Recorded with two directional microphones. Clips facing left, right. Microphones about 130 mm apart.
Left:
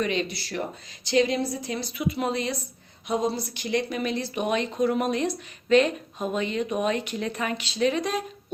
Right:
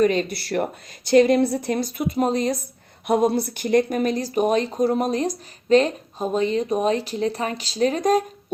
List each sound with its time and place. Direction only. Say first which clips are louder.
0.0 s a woman's voice: right 7 dB; 45° right (ahead or behind)
3.1 s speech: right 7 dB; 60° right (ahead or behind)